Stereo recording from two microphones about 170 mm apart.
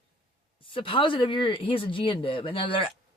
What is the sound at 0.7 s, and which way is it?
Speech, 30° left (ahead or behind).